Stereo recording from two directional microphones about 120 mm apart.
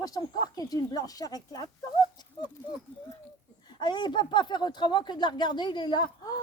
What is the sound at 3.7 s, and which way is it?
A woman's voice, 40° left (ahead or behind).